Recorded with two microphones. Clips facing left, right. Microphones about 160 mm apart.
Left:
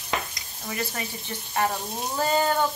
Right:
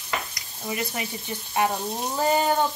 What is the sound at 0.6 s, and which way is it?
Speech, 15° right (ahead or behind).